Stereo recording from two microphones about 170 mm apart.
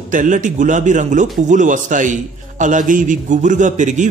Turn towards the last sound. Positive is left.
turn(degrees=-45)  # may be behind; listen again after turning